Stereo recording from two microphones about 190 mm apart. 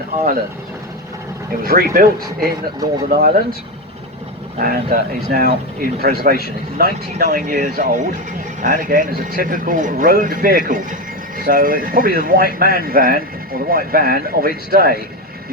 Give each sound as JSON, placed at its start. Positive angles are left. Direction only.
{"t": 1.6, "sound": "speech", "side_deg": -50}
{"t": 4.6, "sound": "speech", "side_deg": -50}